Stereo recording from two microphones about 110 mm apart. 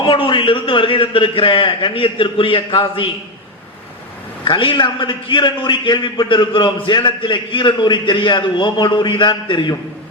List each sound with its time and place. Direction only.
0.0 s a man's voice: 50° left (ahead or behind)
4.4 s a man's voice: 50° left (ahead or behind)